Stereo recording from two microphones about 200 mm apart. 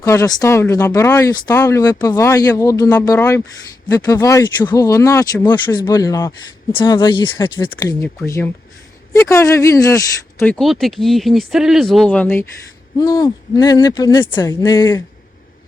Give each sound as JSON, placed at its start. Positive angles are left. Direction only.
{"t": 0.0, "sound": "speech", "side_deg": 15}
{"t": 8.0, "sound": "speech", "side_deg": 10}